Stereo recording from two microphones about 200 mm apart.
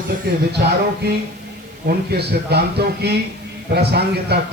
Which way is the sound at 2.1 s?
55° right (ahead or behind).